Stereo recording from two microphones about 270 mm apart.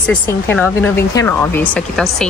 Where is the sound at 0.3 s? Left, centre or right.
Centre.